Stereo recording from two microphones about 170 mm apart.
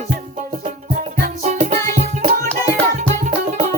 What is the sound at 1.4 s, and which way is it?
Music, 40° right (ahead or behind).